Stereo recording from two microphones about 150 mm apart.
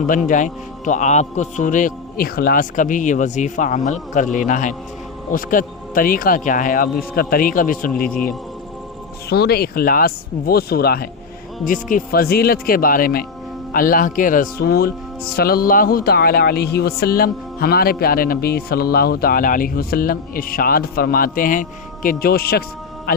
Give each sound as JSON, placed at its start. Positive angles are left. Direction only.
{"t": 0.3, "sound": "a man's voice", "side_deg": 55}
{"t": 7.2, "sound": "speech", "side_deg": 80}
{"t": 9.3, "sound": "speech", "side_deg": 90}
{"t": 11.6, "sound": "speech", "side_deg": 65}